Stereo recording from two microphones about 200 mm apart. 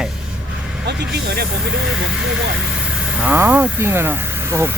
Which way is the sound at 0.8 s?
55° right (ahead or behind).